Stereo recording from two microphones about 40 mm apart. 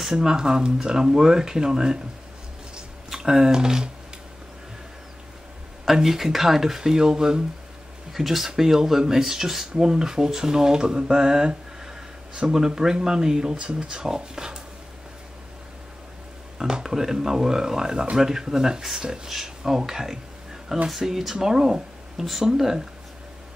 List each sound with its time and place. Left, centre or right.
0.0 s speech: centre
2.7 s a sound: centre
6.0 s speech: centre
8.1 s speech: centre
16.5 s speech: centre